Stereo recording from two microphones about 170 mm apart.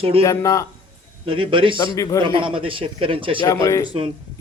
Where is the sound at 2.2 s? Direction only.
30° right (ahead or behind).